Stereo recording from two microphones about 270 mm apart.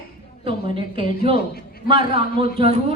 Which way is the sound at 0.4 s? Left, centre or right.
Centre.